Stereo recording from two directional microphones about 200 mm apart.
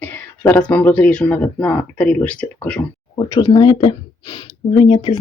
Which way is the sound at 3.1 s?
20° left (ahead or behind).